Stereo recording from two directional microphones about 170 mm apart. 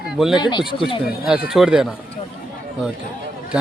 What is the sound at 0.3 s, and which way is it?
Speech, 25° left (ahead or behind).